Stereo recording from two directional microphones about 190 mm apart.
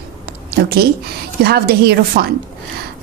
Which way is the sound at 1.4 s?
55° right (ahead or behind).